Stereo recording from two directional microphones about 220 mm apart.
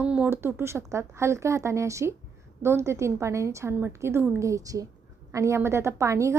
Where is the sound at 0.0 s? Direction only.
5° right (ahead or behind).